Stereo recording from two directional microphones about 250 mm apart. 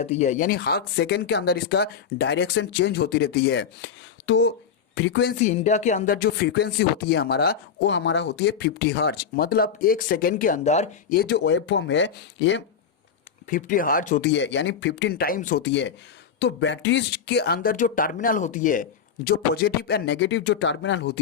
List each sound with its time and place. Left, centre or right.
0.0 s speech: left
13.5 s speech: left
15.6 s speech: left